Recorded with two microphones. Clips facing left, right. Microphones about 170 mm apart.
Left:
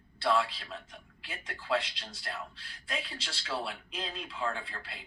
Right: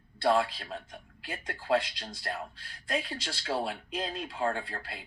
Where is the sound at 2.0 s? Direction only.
40° right (ahead or behind).